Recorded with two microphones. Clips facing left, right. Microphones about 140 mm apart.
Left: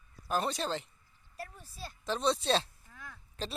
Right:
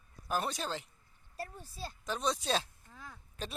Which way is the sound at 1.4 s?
30° right (ahead or behind).